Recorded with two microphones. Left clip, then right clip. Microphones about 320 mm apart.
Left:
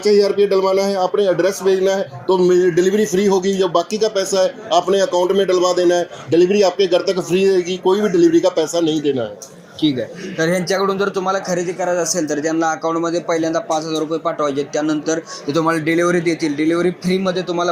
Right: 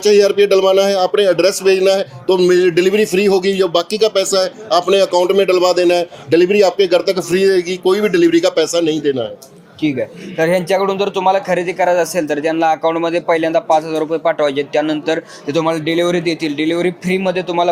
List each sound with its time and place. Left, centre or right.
0.0 s a man's voice: right
1.0 s speech: right
1.4 s a man's voice: right
5.1 s a man's voice: right
5.5 s a man's voice: right
7.3 s speech: right
7.9 s a man's voice: right
9.8 s a man's voice: right
10.3 s a man's voice: right
11.2 s a man's voice: right
15.4 s speech: centre
15.7 s a man's voice: right